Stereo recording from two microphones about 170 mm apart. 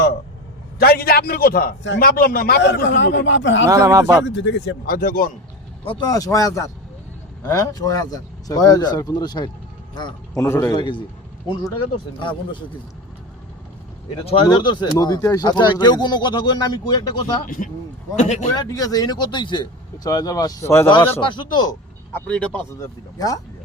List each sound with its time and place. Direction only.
0.8 s a man's voice: 65° left (ahead or behind); by 3.7 s 90° left
3.7 s speech: 20° right (ahead or behind)
4.3 s speech: 90° left; by 5.3 s 55° left (ahead or behind)
5.8 s a man's voice: 30° left (ahead or behind)
10.4 s speech: 15° left (ahead or behind)
10.8 s speech: 30° left (ahead or behind)
12.2 s speech: 30° left (ahead or behind)
14.4 s speech: 25° left (ahead or behind)
17.4 s speech: 50° left (ahead or behind)
18.5 s speech: 20° left (ahead or behind)
21.2 s speech: 25° left (ahead or behind)
22.3 s speech: 10° left (ahead or behind)
23.1 s speech: 20° left (ahead or behind)